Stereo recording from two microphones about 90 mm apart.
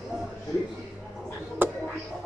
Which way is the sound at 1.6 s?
25° right (ahead or behind).